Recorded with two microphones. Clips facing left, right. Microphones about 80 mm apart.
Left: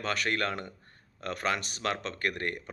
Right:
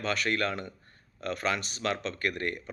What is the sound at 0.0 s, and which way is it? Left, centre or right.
A man's voice, left.